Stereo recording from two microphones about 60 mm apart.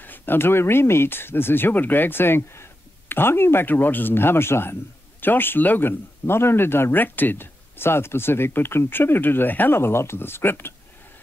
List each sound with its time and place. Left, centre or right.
0.0 s speech: left